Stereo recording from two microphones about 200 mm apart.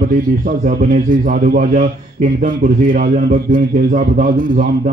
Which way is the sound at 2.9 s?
40° right (ahead or behind).